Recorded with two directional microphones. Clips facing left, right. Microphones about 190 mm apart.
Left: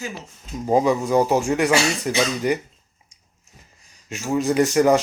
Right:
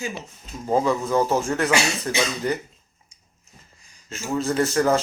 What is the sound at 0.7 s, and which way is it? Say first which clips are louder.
Speech: left 3 dB; 15° left (ahead or behind).